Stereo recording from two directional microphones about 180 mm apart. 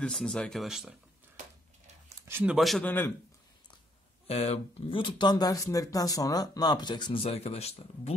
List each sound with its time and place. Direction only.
0.0 s speech: 5° left (ahead or behind)
2.2 s speech: 10° right (ahead or behind); by 3.1 s 10° left (ahead or behind)
4.3 s speech: 35° left (ahead or behind)